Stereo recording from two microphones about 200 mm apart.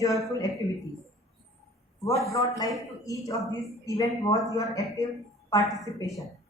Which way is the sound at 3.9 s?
15° left (ahead or behind).